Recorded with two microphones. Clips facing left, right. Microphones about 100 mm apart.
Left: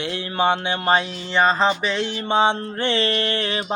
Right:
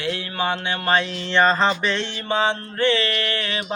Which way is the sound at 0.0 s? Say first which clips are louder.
Left 3 dB; 25° left (ahead or behind).